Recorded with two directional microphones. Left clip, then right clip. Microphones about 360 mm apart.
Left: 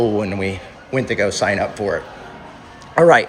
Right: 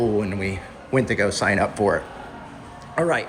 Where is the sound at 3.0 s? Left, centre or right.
Centre.